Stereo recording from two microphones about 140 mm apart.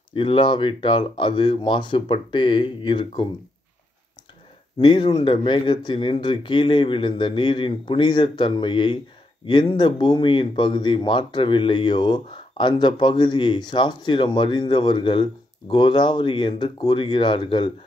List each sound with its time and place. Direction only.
0.1 s speech: 35° left (ahead or behind)
4.7 s speech: 35° left (ahead or behind)